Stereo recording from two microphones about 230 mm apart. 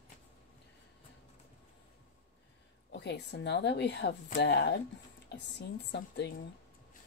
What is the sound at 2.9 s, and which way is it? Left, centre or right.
A woman's voice, left.